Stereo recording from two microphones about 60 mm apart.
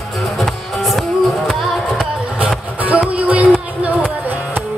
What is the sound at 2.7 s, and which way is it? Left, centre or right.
Music, right.